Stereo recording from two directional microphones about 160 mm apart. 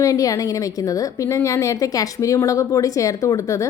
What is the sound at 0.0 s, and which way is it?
A woman's voice, 20° left (ahead or behind).